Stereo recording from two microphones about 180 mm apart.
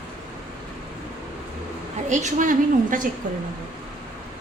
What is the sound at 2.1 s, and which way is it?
Speech, 40° right (ahead or behind).